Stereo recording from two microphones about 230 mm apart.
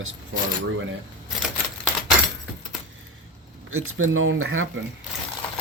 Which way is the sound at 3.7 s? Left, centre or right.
Right.